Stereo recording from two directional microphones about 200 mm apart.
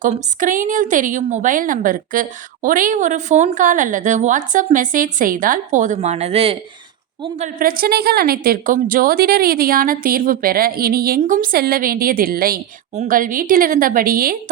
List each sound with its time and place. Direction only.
0.0 s a woman's voice: 40° right (ahead or behind)
7.3 s a woman's voice: 40° right (ahead or behind)